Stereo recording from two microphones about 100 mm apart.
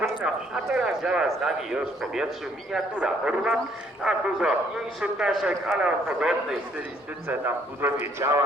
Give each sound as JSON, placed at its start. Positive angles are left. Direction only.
{"t": 0.2, "sound": "a man's voice", "side_deg": -5}
{"t": 7.3, "sound": "a man's voice", "side_deg": -20}